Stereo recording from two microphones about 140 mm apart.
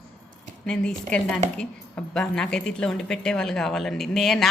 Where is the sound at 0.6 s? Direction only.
5° left (ahead or behind).